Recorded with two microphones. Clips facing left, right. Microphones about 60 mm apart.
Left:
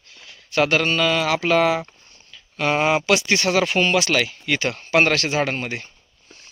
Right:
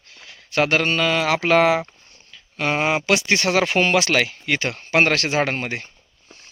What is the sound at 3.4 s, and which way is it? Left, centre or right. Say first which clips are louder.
Speech: even; right.